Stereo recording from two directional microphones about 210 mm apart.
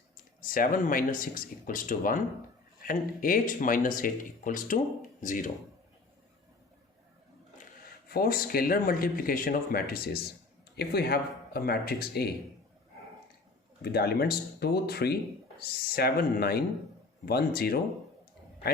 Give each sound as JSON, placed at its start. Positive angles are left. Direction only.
{"t": 0.4, "sound": "speech", "side_deg": 40}
{"t": 8.1, "sound": "speech", "side_deg": 45}
{"t": 13.8, "sound": "speech", "side_deg": 50}